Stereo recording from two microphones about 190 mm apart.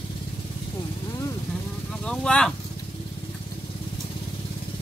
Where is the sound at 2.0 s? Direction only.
5° left (ahead or behind).